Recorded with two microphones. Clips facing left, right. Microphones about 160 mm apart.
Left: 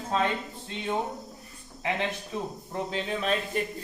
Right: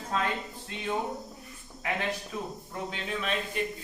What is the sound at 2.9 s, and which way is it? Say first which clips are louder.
Speech: left 4 dB; 35° left (ahead or behind).